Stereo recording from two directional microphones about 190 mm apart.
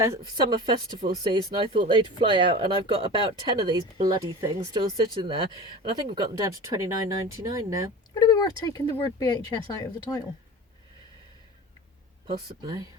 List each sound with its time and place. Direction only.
0.0 s speech: 20° right (ahead or behind)
8.1 s speech: 20° left (ahead or behind)
12.3 s speech: 20° right (ahead or behind)